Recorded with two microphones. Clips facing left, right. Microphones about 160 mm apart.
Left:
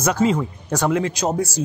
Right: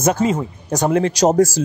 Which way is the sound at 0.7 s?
35° right (ahead or behind).